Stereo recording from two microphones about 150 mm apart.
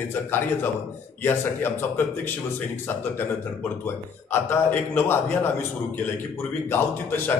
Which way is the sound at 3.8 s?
15° left (ahead or behind).